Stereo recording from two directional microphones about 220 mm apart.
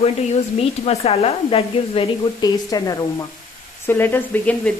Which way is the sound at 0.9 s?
25° left (ahead or behind).